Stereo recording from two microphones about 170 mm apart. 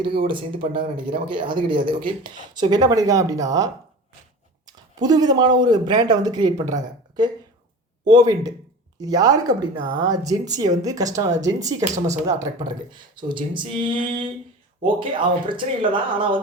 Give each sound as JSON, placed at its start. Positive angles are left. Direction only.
{"t": 0.3, "sound": "speech", "side_deg": -30}
{"t": 11.9, "sound": "speech", "side_deg": -45}
{"t": 12.3, "sound": "speech", "side_deg": -20}